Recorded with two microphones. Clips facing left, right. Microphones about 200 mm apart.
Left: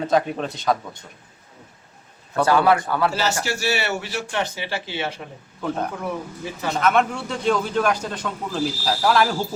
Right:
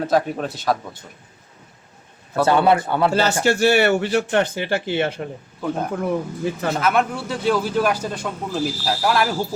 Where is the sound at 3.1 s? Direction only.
55° right (ahead or behind).